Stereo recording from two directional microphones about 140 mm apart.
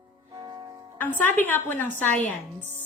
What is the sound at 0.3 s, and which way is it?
Music, 30° right (ahead or behind).